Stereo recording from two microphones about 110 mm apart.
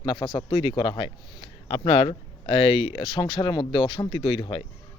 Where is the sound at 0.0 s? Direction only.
45° left (ahead or behind).